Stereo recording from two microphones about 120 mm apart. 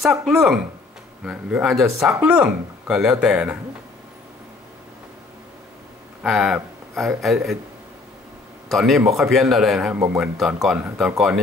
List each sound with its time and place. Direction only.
0.0 s speech: 5° right (ahead or behind)
6.2 s speech: centre (ahead or behind)
8.6 s speech: centre (ahead or behind)
9.9 s speech: 20° right (ahead or behind)
10.2 s speech: centre (ahead or behind)